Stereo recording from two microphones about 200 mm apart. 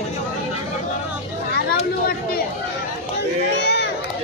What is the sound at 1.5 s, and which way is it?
Chatter, 50° left (ahead or behind).